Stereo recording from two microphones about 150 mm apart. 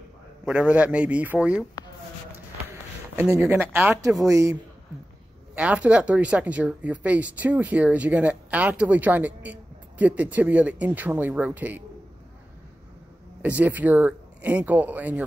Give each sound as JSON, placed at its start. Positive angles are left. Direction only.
{"t": 0.5, "sound": "speech", "side_deg": -10}
{"t": 2.7, "sound": "speech", "side_deg": -20}
{"t": 5.5, "sound": "speech", "side_deg": -10}
{"t": 13.4, "sound": "speech", "side_deg": -10}